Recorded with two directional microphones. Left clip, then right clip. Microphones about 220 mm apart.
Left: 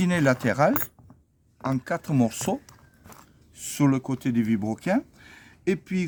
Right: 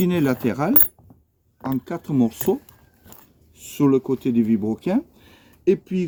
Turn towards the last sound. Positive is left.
turn(degrees=50)  # may be behind; listen again after turning